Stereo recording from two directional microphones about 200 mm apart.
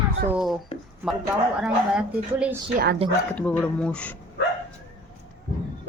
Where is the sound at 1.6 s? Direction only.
5° right (ahead or behind).